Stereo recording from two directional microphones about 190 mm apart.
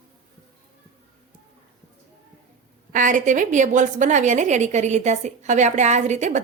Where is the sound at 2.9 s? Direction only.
45° right (ahead or behind).